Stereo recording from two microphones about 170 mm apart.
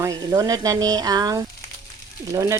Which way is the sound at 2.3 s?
15° right (ahead or behind).